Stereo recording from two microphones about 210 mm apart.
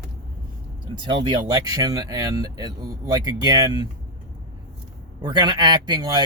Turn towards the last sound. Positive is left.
turn(degrees=-20)  # may be behind; listen again after turning